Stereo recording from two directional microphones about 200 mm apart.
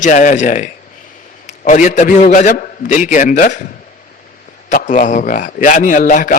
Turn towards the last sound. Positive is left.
turn(degrees=40)  # may be behind; listen again after turning